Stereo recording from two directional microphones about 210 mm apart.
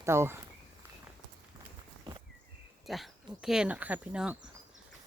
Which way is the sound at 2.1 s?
20° right (ahead or behind).